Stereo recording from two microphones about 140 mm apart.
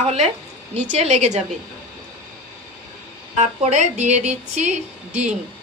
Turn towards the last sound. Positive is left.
turn(degrees=-55)  # may be behind; listen again after turning